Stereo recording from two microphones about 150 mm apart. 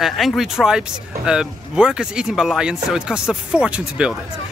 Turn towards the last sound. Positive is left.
turn(degrees=-5)  # may be behind; listen again after turning